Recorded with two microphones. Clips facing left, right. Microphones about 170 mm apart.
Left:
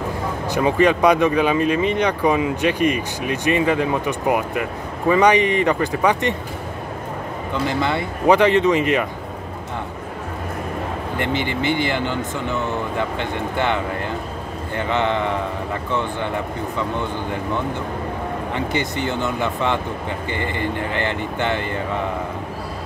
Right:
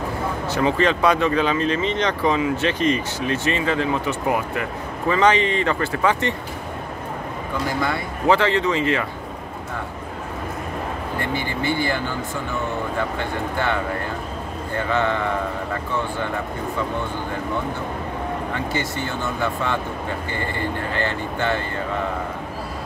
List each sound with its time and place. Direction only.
0.5 s speech: 15° left (ahead or behind)
7.6 s speech: 25° left (ahead or behind)
11.1 s speech: 20° left (ahead or behind)
14.8 s speech: 20° left (ahead or behind)
18.5 s speech: 20° left (ahead or behind)